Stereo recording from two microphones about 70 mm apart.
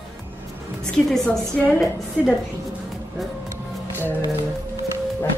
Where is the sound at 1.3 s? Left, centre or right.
Left.